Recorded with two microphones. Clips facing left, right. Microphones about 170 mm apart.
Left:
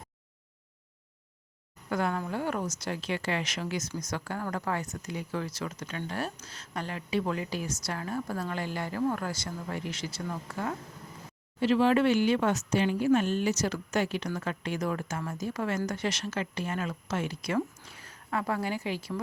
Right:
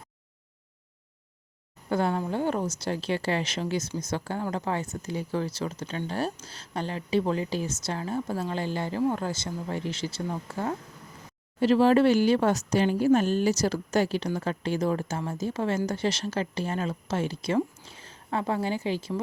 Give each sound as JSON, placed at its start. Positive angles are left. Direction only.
{"t": 1.9, "sound": "a woman's voice", "side_deg": -30}
{"t": 11.6, "sound": "speech", "side_deg": -40}